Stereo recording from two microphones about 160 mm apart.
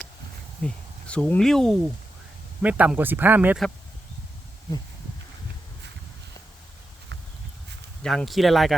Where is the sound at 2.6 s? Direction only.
10° right (ahead or behind).